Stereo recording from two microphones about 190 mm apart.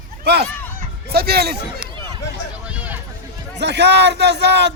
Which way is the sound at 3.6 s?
65° right (ahead or behind).